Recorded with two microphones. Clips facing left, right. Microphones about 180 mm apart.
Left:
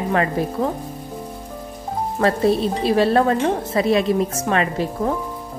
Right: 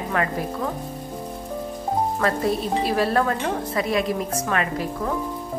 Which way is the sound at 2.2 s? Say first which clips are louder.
Left 9 dB; 25° left (ahead or behind).